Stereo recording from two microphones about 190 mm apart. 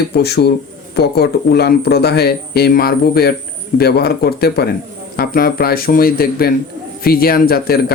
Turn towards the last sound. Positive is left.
turn(degrees=55)  # may be behind; listen again after turning